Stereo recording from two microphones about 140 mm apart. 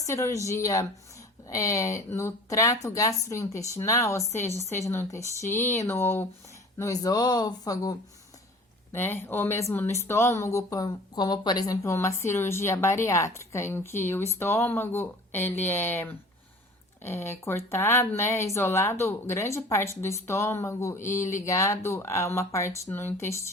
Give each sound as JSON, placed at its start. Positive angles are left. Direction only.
{"t": 0.0, "sound": "a woman's voice", "side_deg": 20}